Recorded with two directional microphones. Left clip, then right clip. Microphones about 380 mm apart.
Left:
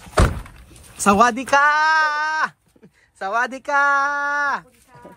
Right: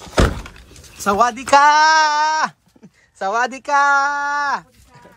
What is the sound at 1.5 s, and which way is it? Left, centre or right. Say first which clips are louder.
Speech: right 4 dB; centre.